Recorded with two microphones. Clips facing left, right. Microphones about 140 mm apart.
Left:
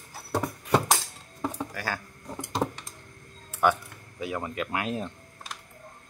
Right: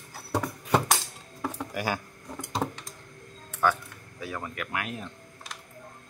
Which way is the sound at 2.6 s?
15° left (ahead or behind).